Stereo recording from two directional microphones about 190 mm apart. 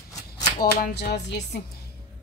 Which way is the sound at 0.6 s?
55° left (ahead or behind).